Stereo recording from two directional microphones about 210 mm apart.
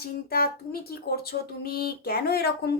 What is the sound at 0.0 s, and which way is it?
Speech, 45° left (ahead or behind).